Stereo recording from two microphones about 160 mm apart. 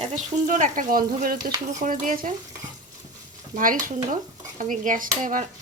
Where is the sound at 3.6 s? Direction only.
60° right (ahead or behind).